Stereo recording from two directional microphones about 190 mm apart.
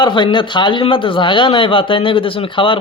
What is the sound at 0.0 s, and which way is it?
Speech, 25° left (ahead or behind).